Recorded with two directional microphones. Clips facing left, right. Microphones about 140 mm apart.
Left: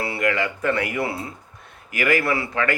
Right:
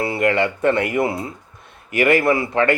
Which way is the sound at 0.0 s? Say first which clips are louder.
Right 5 dB; 25° right (ahead or behind).